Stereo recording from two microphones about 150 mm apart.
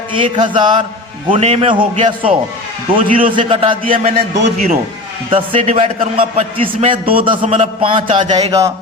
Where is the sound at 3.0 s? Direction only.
65° right (ahead or behind).